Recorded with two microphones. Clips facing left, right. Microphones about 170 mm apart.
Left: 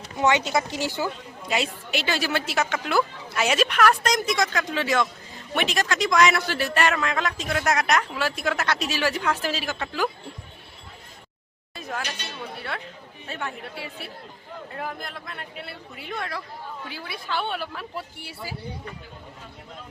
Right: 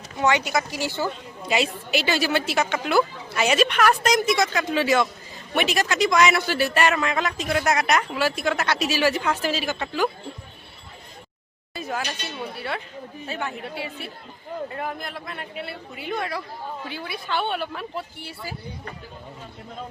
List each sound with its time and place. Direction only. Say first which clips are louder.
0.2 s speech: even; 20° left (ahead or behind)
1.5 s a man's voice: right 3 dB; centre (ahead or behind)
11.7 s a sound: right 3 dB; centre (ahead or behind)
12.5 s a man's voice: right 3 dB; 5° right (ahead or behind)
14.7 s a man's voice: right 2 dB; centre (ahead or behind)